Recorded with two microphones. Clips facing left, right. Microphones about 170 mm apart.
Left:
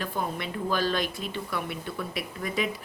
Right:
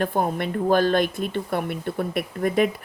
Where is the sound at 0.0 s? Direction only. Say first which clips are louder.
Right 8 dB; 50° right (ahead or behind).